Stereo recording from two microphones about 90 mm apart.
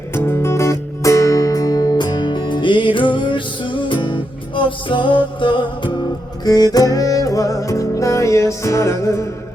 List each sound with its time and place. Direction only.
0.1 s music: 25° left (ahead or behind); by 5.9 s 60° left (ahead or behind)
6.4 s music: 45° left (ahead or behind)